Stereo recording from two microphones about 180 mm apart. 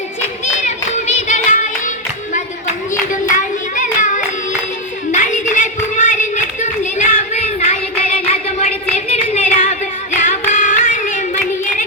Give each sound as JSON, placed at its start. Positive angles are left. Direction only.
{"t": 0.6, "sound": "clapping", "side_deg": 40}
{"t": 3.1, "sound": "hands", "side_deg": 45}
{"t": 5.1, "sound": "a sound", "side_deg": 40}
{"t": 10.2, "sound": "music", "side_deg": 45}